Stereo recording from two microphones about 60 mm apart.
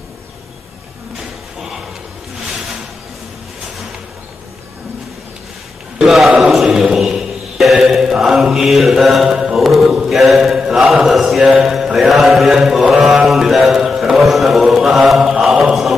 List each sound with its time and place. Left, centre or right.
6.0 s a sound: centre
6.5 s chant: centre
9.9 s mantra: centre
10.9 s chant: centre
11.6 s mantra: centre